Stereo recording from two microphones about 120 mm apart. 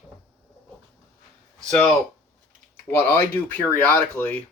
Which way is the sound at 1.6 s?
10° left (ahead or behind).